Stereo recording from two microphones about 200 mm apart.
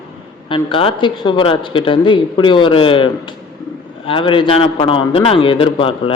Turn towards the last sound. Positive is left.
turn(degrees=25)  # may be behind; listen again after turning